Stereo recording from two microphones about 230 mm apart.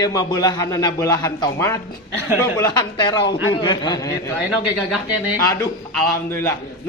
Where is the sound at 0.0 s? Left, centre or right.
Centre.